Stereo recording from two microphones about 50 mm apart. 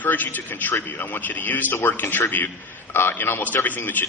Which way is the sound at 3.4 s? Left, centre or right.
Left.